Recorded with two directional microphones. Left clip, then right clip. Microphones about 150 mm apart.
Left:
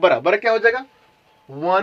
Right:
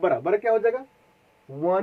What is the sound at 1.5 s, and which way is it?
Speech, 20° left (ahead or behind).